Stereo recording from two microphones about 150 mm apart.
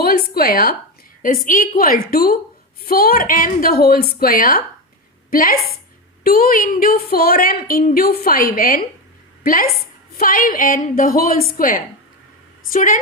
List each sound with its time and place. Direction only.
0.0 s a sound: 90° left
1.5 s speech: 70° left (ahead or behind)
2.8 s a woman's voice: 90° left; by 13.0 s 60° left (ahead or behind)